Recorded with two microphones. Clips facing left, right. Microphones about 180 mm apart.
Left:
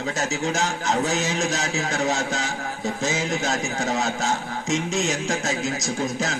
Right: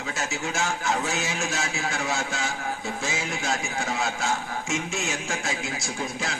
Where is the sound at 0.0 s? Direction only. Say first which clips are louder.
Left 5 dB; 40° left (ahead or behind).